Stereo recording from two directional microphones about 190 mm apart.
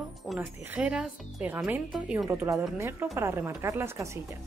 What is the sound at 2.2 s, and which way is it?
Speech, 15° right (ahead or behind).